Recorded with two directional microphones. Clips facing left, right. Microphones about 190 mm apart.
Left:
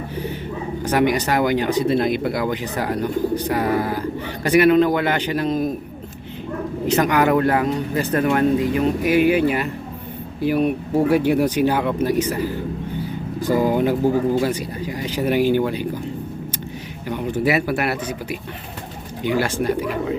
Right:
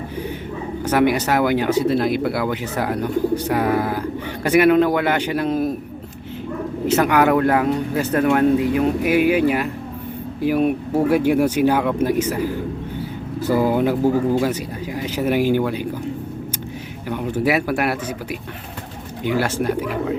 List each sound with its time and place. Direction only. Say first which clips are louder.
0.9 s speech: right 1 dB; 10° right (ahead or behind)
6.8 s speech: right 1 dB; 5° right (ahead or behind)
17.1 s speech: even; 10° right (ahead or behind)
19.3 s speech: even; 5° right (ahead or behind)